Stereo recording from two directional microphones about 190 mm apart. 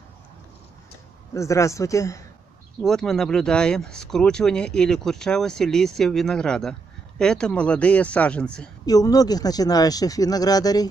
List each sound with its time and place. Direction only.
1.3 s a man's voice: 15° left (ahead or behind)
2.8 s speech: centre (ahead or behind)
8.8 s speech: 20° left (ahead or behind)